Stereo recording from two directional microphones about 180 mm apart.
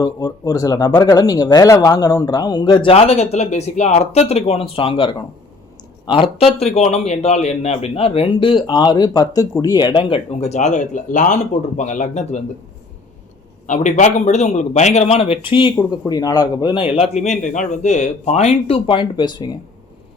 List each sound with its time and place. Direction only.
0.0 s a man's voice: 20° left (ahead or behind); by 12.4 s 40° left (ahead or behind)
13.7 s a man's voice: 40° left (ahead or behind); by 19.5 s 25° left (ahead or behind)